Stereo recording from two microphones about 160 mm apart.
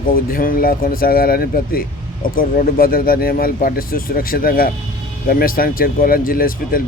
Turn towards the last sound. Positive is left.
turn(degrees=65)  # may be behind; listen again after turning